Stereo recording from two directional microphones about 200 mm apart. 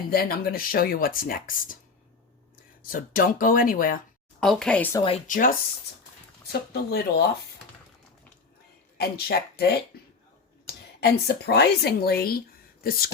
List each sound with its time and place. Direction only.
0.1 s speech: 50° left (ahead or behind)
2.8 s speech: 45° left (ahead or behind)
4.4 s speech: 5° left (ahead or behind)
5.3 s speech: 45° left (ahead or behind)
9.0 s speech: 50° left (ahead or behind)
11.0 s speech: 55° left (ahead or behind)